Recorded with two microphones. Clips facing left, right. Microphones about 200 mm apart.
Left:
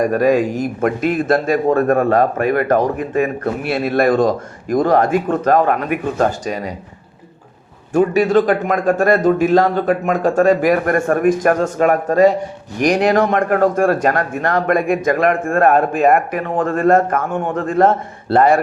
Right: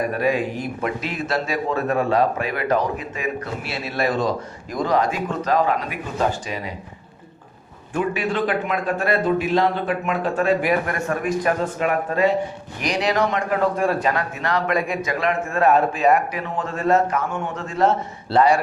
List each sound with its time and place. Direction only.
0.0 s speech: 45° left (ahead or behind)
7.9 s speech: 45° left (ahead or behind)